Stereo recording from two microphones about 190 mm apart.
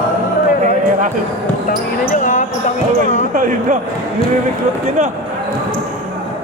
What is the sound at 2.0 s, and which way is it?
Basketball bounce, 40° left (ahead or behind).